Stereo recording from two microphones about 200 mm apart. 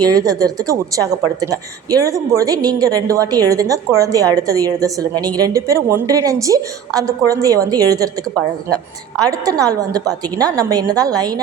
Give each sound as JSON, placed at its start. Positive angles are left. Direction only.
{"t": 0.0, "sound": "a woman's voice", "side_deg": -20}
{"t": 9.2, "sound": "a woman's voice", "side_deg": -15}